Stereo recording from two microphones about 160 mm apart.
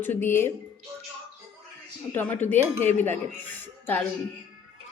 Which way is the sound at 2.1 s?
10° left (ahead or behind).